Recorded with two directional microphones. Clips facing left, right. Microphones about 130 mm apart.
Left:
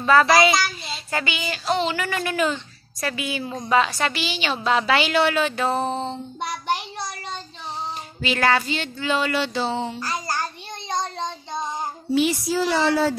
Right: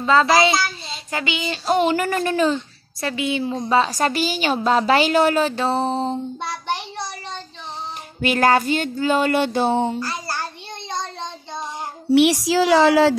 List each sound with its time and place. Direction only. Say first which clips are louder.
0.0 s a child's voice: even; 20° right (ahead or behind)
1.1 s a sound: right 2 dB; 15° right (ahead or behind)
1.7 s speech: right 5 dB; 45° right (ahead or behind)
6.4 s child singing: left 1 dB; 15° left (ahead or behind)
8.2 s speech: right 4 dB; 50° right (ahead or behind)
10.9 s child singing: left 2 dB; 15° left (ahead or behind)
12.1 s speech: right 6 dB; 80° right